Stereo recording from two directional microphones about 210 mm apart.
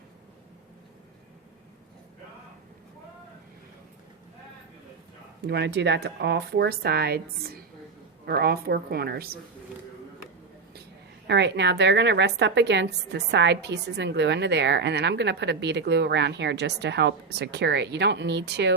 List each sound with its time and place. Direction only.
5.4 s speech: 55° right (ahead or behind)
8.3 s speech: 50° right (ahead or behind)
11.3 s a woman's voice: 55° right (ahead or behind)